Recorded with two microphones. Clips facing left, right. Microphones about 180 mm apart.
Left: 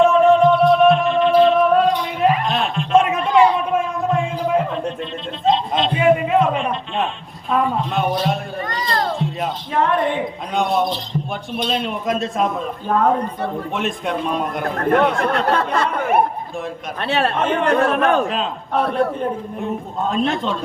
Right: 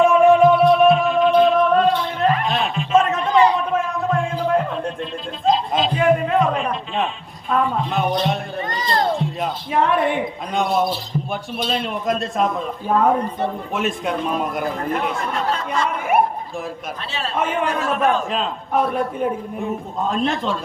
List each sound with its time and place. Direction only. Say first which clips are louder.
0.0 s music: even; 10° right (ahead or behind); by 2.4 s 15° left (ahead or behind)
2.5 s a sound: left 1 dB; centre (ahead or behind)
3.0 s a sound: left 1 dB; 10° left (ahead or behind)
7.5 s children playing: left 1 dB; centre (ahead or behind)
9.1 s music: even; centre (ahead or behind)
9.8 s a woman's voice: even; 10° right (ahead or behind)
14.8 s speech: left 7 dB; 65° left (ahead or behind)
17.0 s speech: left 6 dB; 60° left (ahead or behind)
18.3 s a man's voice: even; centre (ahead or behind)